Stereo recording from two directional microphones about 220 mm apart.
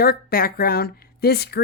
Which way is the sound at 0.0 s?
45° left (ahead or behind).